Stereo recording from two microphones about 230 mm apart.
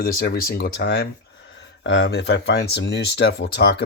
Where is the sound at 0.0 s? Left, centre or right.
Left.